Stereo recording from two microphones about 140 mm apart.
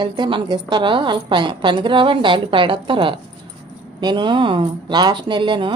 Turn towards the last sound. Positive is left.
turn(degrees=-35)  # may be behind; listen again after turning